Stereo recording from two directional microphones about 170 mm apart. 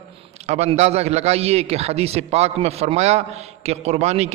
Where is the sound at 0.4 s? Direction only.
40° right (ahead or behind).